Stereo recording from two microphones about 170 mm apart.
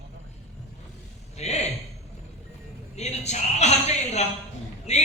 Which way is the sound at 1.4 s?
40° left (ahead or behind).